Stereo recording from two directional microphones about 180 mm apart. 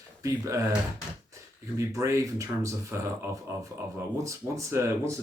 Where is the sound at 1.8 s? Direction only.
15° right (ahead or behind).